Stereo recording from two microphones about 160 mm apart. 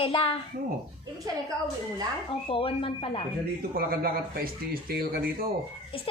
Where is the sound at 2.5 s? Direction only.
35° left (ahead or behind).